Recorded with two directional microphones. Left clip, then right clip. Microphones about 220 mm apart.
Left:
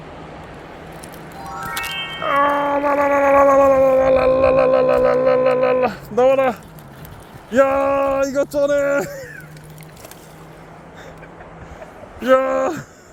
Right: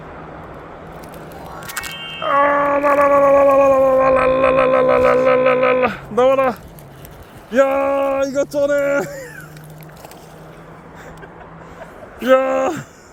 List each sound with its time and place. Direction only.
2.2 s music: 25° left (ahead or behind)
2.5 s howl: 15° left (ahead or behind)
7.5 s speech: centre (ahead or behind)
12.2 s speech: 5° right (ahead or behind)